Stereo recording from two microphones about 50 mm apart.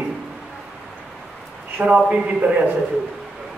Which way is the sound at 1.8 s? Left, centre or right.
Right.